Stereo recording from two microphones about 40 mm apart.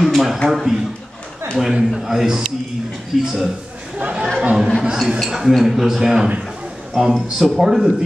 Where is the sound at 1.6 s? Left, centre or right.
Centre.